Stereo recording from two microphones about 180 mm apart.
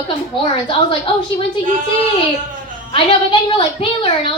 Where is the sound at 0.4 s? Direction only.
25° left (ahead or behind).